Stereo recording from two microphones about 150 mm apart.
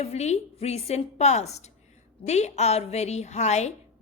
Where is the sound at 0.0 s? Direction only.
45° left (ahead or behind).